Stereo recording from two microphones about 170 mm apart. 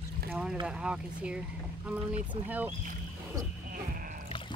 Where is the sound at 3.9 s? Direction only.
55° right (ahead or behind).